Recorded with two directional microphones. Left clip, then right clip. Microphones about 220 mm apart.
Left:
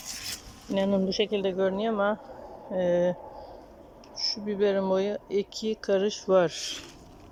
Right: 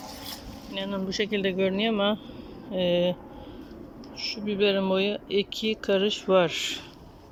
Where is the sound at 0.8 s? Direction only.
30° left (ahead or behind).